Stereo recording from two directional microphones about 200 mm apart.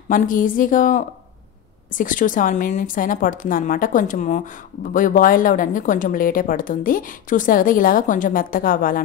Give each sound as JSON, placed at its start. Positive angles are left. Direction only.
{"t": 0.1, "sound": "a woman's voice", "side_deg": 40}